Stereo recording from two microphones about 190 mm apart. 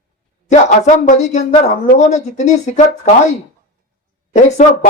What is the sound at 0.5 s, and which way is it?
Speech, 40° left (ahead or behind).